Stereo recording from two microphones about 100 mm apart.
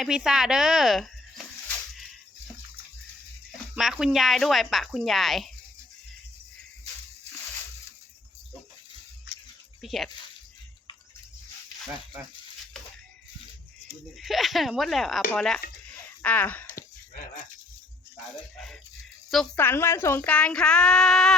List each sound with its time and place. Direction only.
0.0 s speech: 5° right (ahead or behind)
3.8 s speech: 5° right (ahead or behind)
9.8 s speech: centre (ahead or behind)
14.2 s speech: centre (ahead or behind)
15.3 s child singing: 10° left (ahead or behind)
16.2 s speech: 15° left (ahead or behind)
18.5 s speech: 5° left (ahead or behind)
19.5 s a woman's voice: 25° left (ahead or behind)
20.2 s child singing: 10° left (ahead or behind)